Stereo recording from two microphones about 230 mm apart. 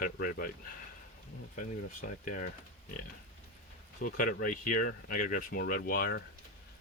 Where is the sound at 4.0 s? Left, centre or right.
Left.